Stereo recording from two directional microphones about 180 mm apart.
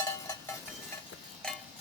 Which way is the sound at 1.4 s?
5° left (ahead or behind).